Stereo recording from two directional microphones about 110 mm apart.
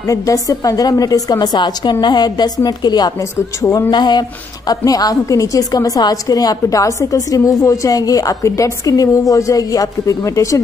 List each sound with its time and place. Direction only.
0.1 s a woman's voice: 30° left (ahead or behind)
3.3 s a man's voice: 25° left (ahead or behind)
3.9 s a woman's voice: 40° left (ahead or behind)